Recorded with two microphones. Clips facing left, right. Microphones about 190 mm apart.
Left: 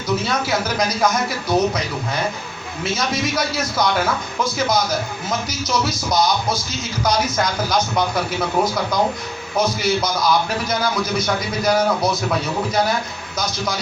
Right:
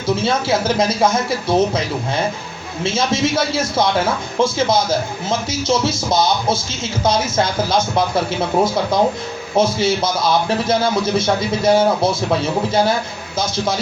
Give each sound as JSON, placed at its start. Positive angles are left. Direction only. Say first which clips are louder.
{"t": 0.2, "sound": "speech", "louder": "right 4 dB", "side_deg": -25}